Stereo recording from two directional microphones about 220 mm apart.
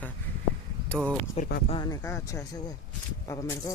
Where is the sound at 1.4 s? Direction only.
30° left (ahead or behind).